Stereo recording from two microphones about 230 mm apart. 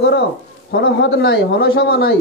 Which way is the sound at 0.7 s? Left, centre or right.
Left.